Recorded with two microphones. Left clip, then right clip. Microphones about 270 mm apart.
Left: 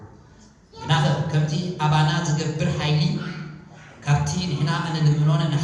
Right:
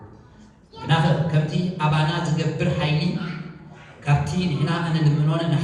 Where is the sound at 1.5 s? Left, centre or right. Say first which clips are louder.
Left 3 dB; left.